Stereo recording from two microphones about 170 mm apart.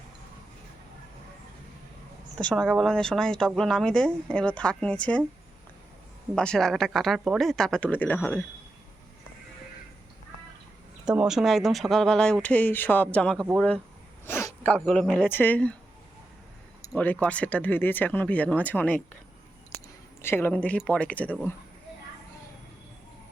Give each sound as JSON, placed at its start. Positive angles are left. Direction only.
{"t": 2.4, "sound": "speech", "side_deg": 5}
{"t": 6.3, "sound": "speech", "side_deg": 5}
{"t": 11.0, "sound": "speech", "side_deg": -5}
{"t": 14.3, "sound": "speech", "side_deg": 15}
{"t": 16.9, "sound": "speech", "side_deg": 10}
{"t": 20.2, "sound": "speech", "side_deg": 15}